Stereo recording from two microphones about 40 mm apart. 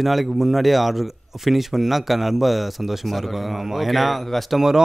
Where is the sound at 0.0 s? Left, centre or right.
Centre.